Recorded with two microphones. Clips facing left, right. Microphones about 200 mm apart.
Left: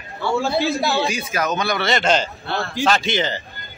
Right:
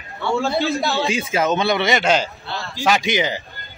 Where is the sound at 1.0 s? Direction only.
25° right (ahead or behind).